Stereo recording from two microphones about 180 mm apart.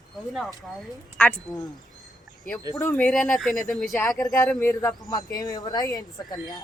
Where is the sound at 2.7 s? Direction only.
15° left (ahead or behind).